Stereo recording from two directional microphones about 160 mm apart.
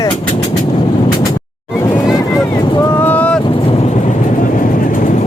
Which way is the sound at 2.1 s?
20° left (ahead or behind).